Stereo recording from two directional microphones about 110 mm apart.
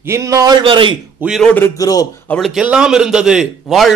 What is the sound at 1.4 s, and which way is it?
Speech, 15° left (ahead or behind).